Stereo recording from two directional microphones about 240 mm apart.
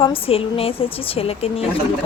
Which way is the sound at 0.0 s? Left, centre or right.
Left.